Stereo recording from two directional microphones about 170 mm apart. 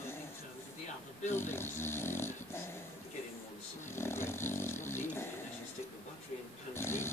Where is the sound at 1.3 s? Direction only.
15° left (ahead or behind).